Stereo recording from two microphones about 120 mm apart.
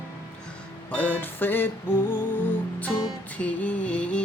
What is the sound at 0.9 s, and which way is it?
Music, 15° left (ahead or behind).